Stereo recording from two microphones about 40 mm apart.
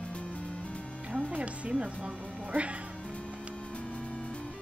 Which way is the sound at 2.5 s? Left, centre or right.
Right.